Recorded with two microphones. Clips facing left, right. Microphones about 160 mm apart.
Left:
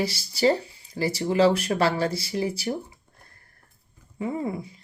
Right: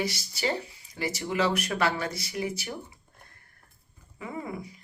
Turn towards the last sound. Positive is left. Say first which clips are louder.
# left 6 dB
turn(degrees=30)  # may be behind; listen again after turning